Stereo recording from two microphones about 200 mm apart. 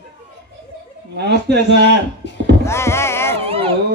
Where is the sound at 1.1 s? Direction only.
55° right (ahead or behind).